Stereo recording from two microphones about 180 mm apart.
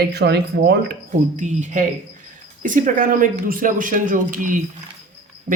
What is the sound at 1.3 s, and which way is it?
Speech, 45° right (ahead or behind).